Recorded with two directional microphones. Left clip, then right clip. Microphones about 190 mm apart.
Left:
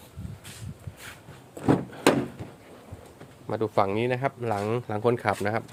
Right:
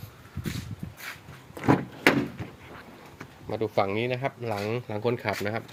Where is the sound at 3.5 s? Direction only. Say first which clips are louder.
Left 2 dB; 15° left (ahead or behind).